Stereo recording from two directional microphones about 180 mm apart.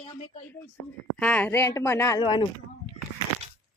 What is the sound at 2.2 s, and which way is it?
Speech, 25° left (ahead or behind).